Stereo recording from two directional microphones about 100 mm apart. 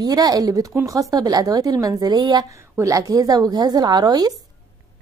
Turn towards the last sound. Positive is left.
turn(degrees=-40)  # may be behind; listen again after turning